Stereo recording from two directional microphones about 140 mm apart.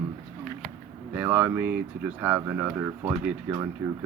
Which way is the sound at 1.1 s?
20° right (ahead or behind).